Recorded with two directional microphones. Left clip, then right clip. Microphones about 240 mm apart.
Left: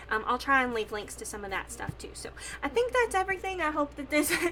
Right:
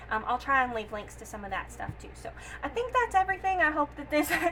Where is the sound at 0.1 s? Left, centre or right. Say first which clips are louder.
Left 1 dB; left.